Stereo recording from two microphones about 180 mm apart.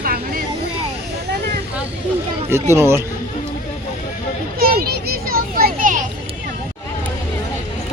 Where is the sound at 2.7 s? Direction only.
15° right (ahead or behind).